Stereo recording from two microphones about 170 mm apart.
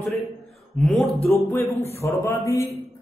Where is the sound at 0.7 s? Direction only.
Centre (ahead or behind).